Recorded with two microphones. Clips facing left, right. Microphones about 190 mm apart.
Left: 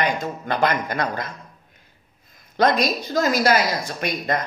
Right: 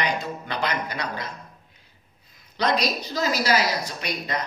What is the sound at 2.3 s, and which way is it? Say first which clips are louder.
Speech: left 5 dB; 50° left (ahead or behind).